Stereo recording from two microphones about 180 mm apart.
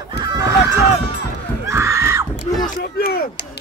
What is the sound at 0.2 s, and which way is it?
Fowl, 20° right (ahead or behind).